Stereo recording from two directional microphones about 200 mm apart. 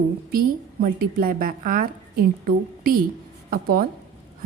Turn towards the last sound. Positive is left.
turn(degrees=-45)  # may be behind; listen again after turning